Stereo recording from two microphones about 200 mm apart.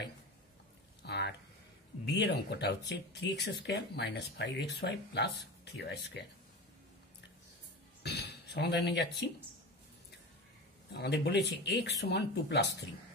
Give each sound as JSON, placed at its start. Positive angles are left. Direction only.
{"t": 1.0, "sound": "a sound", "side_deg": 55}
{"t": 2.0, "sound": "speech", "side_deg": 60}
{"t": 8.0, "sound": "speech", "side_deg": 55}
{"t": 10.9, "sound": "speech", "side_deg": 55}